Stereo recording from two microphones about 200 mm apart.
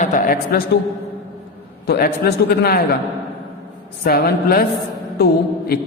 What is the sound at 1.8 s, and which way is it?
A woman's voice, 50° left (ahead or behind).